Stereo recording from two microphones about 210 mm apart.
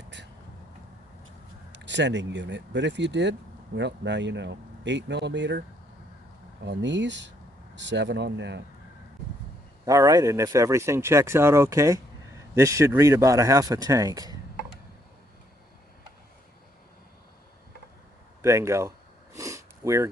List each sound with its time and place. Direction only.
1.8 s speech: 55° right (ahead or behind)
9.8 s speech: 15° right (ahead or behind)
18.4 s a sound: 15° right (ahead or behind)